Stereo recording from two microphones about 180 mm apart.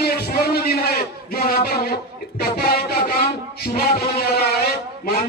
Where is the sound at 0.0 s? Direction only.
60° left (ahead or behind).